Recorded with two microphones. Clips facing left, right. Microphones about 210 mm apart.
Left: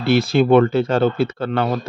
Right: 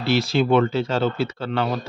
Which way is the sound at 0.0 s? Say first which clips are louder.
Left 4 dB; 55° left (ahead or behind).